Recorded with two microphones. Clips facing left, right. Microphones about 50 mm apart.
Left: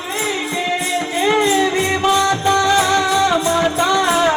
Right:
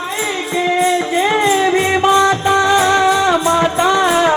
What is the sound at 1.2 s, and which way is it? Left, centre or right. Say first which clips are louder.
Music: even; centre.